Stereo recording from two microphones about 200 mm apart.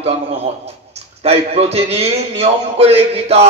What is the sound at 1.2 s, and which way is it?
A man's voice, 30° right (ahead or behind).